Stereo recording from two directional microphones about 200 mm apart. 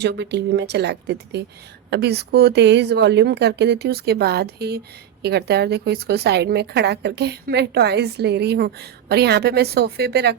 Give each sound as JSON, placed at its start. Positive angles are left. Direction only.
{"t": 0.0, "sound": "a woman's voice", "side_deg": -55}